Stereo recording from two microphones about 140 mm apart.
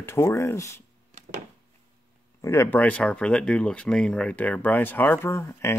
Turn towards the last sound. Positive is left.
turn(degrees=20)  # may be behind; listen again after turning